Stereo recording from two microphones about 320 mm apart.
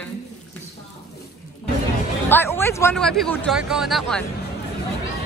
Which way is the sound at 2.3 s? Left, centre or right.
Centre.